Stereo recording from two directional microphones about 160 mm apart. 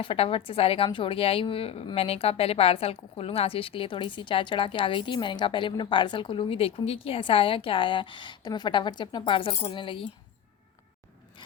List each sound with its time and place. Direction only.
0.0 s a woman's voice: 35° left (ahead or behind)